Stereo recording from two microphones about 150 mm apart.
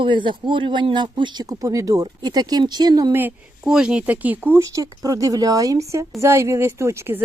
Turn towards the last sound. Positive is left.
turn(degrees=-15)  # may be behind; listen again after turning